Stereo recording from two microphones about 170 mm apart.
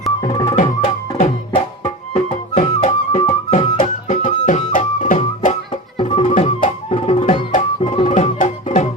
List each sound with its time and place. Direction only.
0.2 s music: 20° left (ahead or behind)
1.2 s music: 40° left (ahead or behind)
6.0 s music: 35° left (ahead or behind)